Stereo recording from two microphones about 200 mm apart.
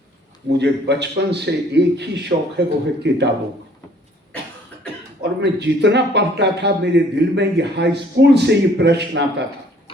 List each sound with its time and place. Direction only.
0.5 s a man's voice: 60° right (ahead or behind)
5.4 s a man's voice: 60° right (ahead or behind)